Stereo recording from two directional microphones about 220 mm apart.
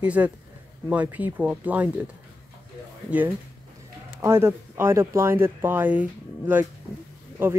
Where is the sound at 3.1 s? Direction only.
5° right (ahead or behind).